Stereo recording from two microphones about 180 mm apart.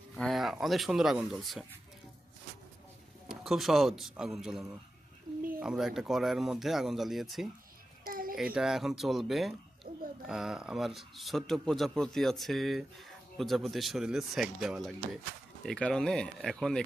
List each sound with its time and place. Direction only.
0.2 s speech: centre (ahead or behind)
3.2 s speech: centre (ahead or behind)
8.0 s a sound: 50° right (ahead or behind)
8.5 s speech: centre (ahead or behind)
9.9 s a sound: 30° right (ahead or behind)
10.2 s speech: 5° right (ahead or behind)